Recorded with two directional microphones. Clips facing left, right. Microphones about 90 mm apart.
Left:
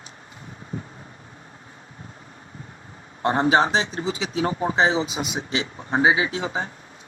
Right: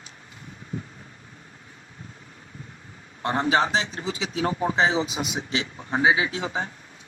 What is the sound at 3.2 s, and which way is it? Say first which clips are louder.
A man's voice: left 3 dB; 30° left (ahead or behind).